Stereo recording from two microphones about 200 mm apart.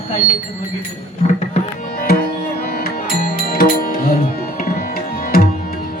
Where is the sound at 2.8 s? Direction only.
45° left (ahead or behind).